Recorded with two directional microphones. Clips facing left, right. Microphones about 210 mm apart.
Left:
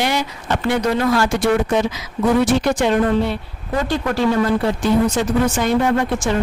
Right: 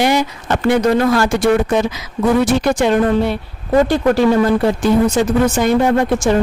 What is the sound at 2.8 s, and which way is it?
Speech, 55° right (ahead or behind).